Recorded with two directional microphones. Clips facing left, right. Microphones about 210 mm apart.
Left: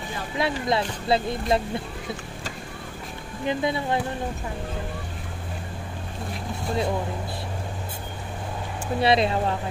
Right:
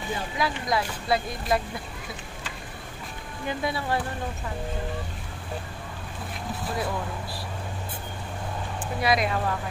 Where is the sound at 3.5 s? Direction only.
20° left (ahead or behind).